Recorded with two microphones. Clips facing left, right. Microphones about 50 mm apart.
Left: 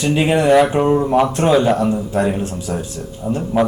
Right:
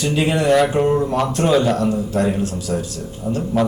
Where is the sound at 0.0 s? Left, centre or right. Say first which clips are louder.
Left 3 dB; left.